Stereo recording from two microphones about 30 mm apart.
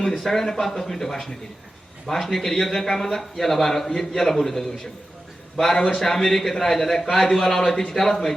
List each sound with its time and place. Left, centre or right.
0.2 s a man's voice: centre